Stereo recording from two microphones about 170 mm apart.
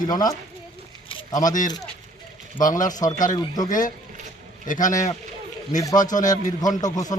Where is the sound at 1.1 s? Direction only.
20° left (ahead or behind).